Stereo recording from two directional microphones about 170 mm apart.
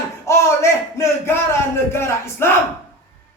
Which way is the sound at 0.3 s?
15° left (ahead or behind).